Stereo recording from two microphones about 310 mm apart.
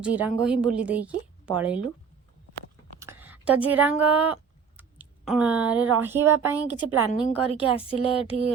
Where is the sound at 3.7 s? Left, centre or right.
Centre.